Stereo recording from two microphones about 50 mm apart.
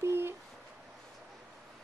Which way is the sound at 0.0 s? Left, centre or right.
Right.